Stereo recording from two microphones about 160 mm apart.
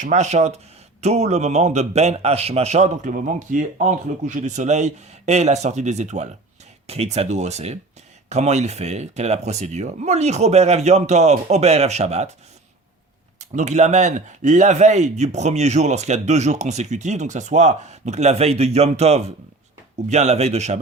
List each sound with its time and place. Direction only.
0.0 s a man's voice: 45° right (ahead or behind)
13.4 s a man's voice: 45° right (ahead or behind)